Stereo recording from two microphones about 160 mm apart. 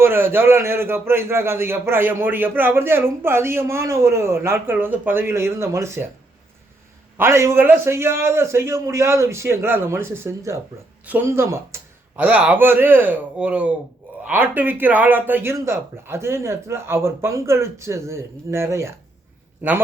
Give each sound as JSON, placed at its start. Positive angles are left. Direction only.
{"t": 0.0, "sound": "a man's voice", "side_deg": -15}
{"t": 7.2, "sound": "a man's voice", "side_deg": -15}